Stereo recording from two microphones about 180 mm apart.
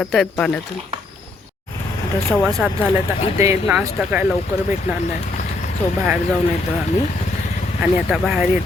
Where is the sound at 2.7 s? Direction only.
35° left (ahead or behind).